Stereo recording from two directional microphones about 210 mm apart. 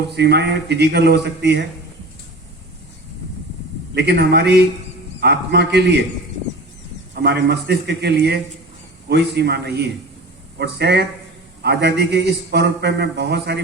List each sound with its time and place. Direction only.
0.0 s a man's voice: 50° right (ahead or behind)
3.9 s a man's voice: 50° right (ahead or behind)
7.2 s a man's voice: 50° right (ahead or behind)